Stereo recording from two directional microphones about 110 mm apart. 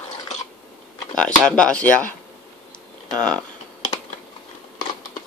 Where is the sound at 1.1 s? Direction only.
10° left (ahead or behind).